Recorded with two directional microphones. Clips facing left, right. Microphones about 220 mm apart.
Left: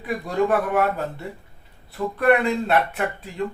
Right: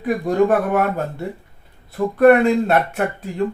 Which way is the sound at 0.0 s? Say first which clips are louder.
Right 6 dB; 45° right (ahead or behind).